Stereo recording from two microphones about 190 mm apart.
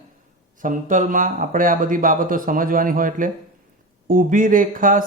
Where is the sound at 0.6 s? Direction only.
45° right (ahead or behind).